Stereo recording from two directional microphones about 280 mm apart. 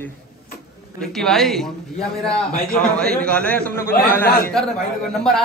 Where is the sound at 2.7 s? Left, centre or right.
Centre.